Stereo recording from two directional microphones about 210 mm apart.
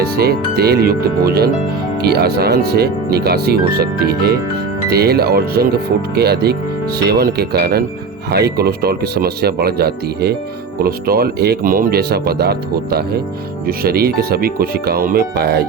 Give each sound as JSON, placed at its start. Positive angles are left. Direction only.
{"t": 0.0, "sound": "speech", "side_deg": -45}